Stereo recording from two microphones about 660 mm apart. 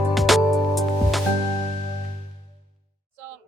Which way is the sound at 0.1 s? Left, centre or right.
Centre.